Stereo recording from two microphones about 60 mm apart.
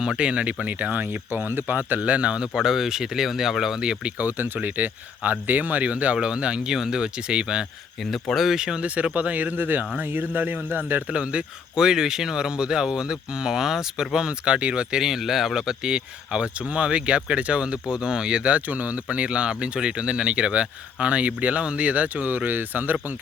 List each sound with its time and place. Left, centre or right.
0.0 s speech: centre
2.5 s speech: centre
4.2 s speech: right; by 7.7 s centre
8.1 s speech: centre
8.5 s speech: centre; by 11.0 s right
11.1 s speech: right
11.8 s speech: centre; by 23.1 s right